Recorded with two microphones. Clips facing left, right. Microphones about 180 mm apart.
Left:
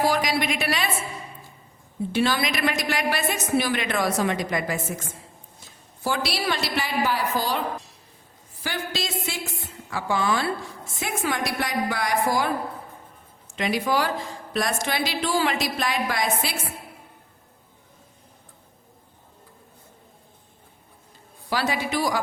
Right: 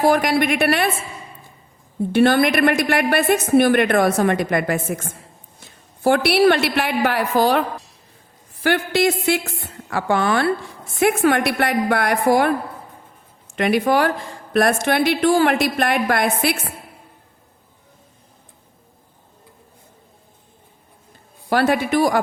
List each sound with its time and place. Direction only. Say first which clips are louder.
0.0 s a woman's voice: right 6 dB; 55° right (ahead or behind)
2.1 s a woman's voice: right 9 dB; 55° right (ahead or behind)
8.6 s a woman's voice: right 12 dB; 65° right (ahead or behind)
13.6 s a woman's voice: right 7 dB; 60° right (ahead or behind)
21.5 s a woman's voice: right 8 dB; 55° right (ahead or behind)